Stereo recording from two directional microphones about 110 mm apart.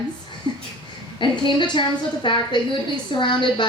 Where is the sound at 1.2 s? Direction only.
45° left (ahead or behind).